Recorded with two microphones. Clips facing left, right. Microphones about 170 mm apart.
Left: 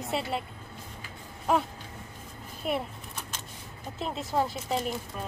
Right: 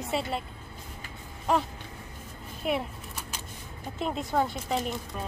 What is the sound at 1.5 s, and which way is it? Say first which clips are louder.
Speech: even; 5° left (ahead or behind).